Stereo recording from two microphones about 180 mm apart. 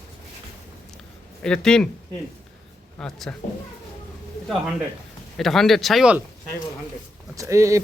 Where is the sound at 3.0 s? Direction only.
5° left (ahead or behind).